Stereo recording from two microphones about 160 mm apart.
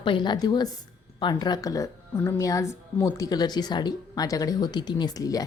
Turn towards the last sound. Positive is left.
turn(degrees=20)  # may be behind; listen again after turning